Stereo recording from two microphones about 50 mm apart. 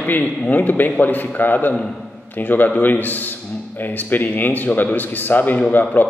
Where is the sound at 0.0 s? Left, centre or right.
Left.